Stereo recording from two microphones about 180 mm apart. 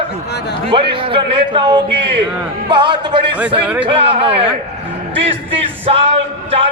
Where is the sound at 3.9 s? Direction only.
30° right (ahead or behind).